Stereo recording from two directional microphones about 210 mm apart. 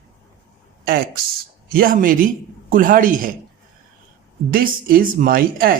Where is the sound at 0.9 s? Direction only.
45° right (ahead or behind).